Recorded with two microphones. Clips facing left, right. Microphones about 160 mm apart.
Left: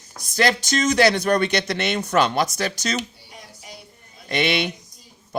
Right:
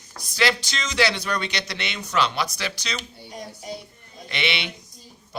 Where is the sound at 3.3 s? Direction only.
40° right (ahead or behind).